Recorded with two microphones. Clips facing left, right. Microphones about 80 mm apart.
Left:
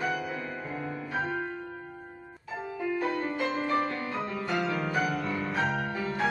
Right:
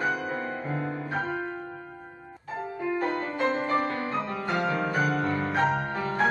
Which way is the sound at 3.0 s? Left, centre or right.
Right.